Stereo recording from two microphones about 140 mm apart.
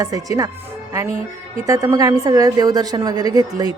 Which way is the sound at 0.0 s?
25° right (ahead or behind).